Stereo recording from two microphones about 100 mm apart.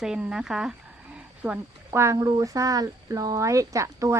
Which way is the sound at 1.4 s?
20° right (ahead or behind).